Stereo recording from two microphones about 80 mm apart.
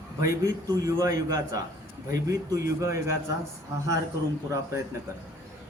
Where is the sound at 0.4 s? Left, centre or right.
Right.